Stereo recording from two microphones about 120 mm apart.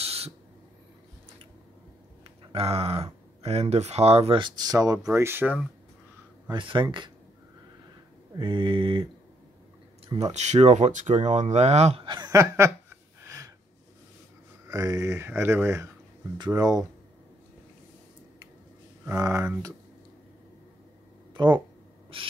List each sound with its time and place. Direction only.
0.0 s owl: 55° right (ahead or behind)
2.2 s speech: 55° right (ahead or behind)
4.4 s speech: 35° right (ahead or behind); by 5.6 s 20° right (ahead or behind)
6.5 s speech: 45° right (ahead or behind)
8.4 s mantra: 45° right (ahead or behind)
10.3 s speech: 70° right (ahead or behind)
12.0 s speech: 40° right (ahead or behind)
12.4 s speech: 25° right (ahead or behind)
12.9 s a sound: 25° right (ahead or behind)
14.7 s speech: 30° right (ahead or behind)
19.0 s speech: 25° right (ahead or behind)
21.3 s a sound: 40° right (ahead or behind)
22.1 s mantra: 45° right (ahead or behind)